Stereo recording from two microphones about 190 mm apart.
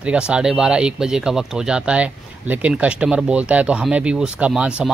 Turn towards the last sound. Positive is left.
turn(degrees=-5)  # may be behind; listen again after turning